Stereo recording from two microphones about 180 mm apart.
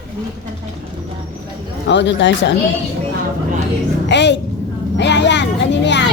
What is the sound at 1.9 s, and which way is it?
Speech, 75° left (ahead or behind).